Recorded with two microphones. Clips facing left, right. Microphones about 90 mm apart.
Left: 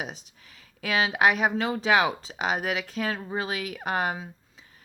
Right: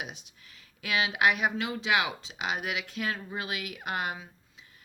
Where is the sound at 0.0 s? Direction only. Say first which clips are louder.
Left 4 dB; 35° left (ahead or behind).